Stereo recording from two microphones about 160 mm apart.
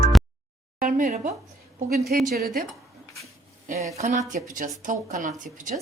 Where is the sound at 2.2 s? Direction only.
70° right (ahead or behind).